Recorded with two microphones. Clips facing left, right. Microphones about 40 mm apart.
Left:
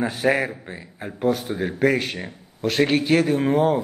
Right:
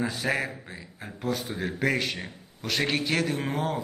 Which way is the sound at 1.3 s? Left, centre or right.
Centre.